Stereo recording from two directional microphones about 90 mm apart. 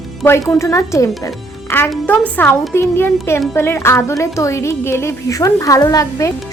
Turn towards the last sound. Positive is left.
turn(degrees=40)  # may be behind; listen again after turning